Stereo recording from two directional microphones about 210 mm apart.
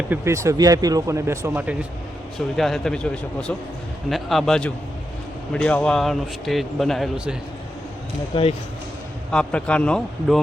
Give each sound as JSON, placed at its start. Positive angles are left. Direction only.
{"t": 0.1, "sound": "a man's voice", "side_deg": -15}
{"t": 8.3, "sound": "speech", "side_deg": 25}
{"t": 9.3, "sound": "a man's voice", "side_deg": 5}